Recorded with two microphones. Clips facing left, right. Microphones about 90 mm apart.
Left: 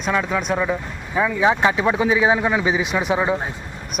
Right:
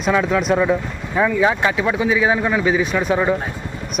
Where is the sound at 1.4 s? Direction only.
20° left (ahead or behind).